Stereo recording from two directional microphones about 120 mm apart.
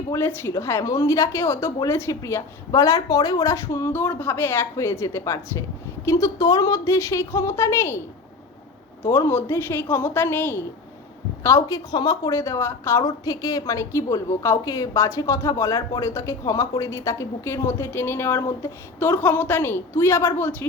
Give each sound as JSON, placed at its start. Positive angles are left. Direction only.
{"t": 0.1, "sound": "a woman's voice", "side_deg": 20}
{"t": 9.0, "sound": "a woman's voice", "side_deg": 20}